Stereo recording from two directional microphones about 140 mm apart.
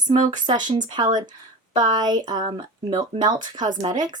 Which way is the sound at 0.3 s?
30° right (ahead or behind).